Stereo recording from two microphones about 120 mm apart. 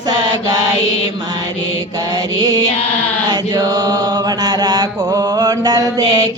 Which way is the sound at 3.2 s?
35° right (ahead or behind).